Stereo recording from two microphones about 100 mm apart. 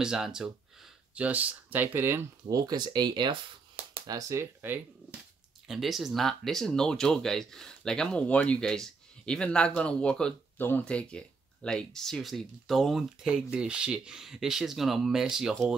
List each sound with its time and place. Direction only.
0.0 s speech: 5° right (ahead or behind); by 2.2 s 20° right (ahead or behind)
2.5 s speech: 40° right (ahead or behind)
4.0 s speech: 35° right (ahead or behind); by 5.2 s 20° right (ahead or behind)
5.7 s speech: centre (ahead or behind)